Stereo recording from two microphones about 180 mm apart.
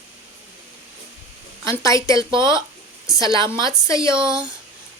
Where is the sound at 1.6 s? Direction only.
15° left (ahead or behind).